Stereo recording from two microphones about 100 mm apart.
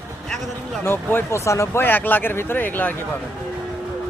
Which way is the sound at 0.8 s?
20° left (ahead or behind).